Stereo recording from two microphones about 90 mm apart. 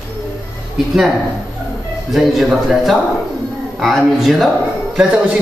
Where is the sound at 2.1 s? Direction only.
5° right (ahead or behind).